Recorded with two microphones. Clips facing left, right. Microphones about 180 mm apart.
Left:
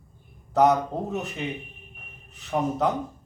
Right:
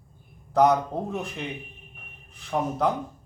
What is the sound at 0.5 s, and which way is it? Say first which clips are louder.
Speech: even; centre (ahead or behind).